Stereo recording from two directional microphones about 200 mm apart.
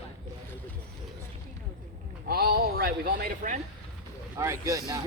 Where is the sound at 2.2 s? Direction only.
50° right (ahead or behind).